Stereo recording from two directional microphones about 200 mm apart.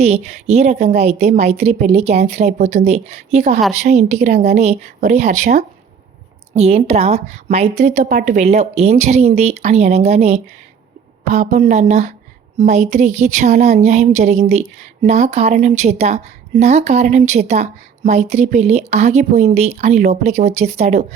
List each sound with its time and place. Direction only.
0.0 s a woman's voice: 35° right (ahead or behind)